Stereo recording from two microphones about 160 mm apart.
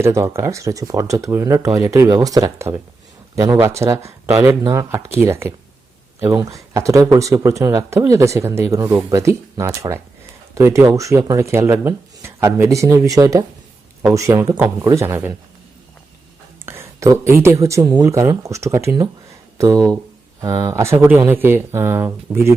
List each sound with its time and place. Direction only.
0.0 s speech: 15° right (ahead or behind)
16.6 s a sound: 15° right (ahead or behind)
17.4 s speech: 20° right (ahead or behind)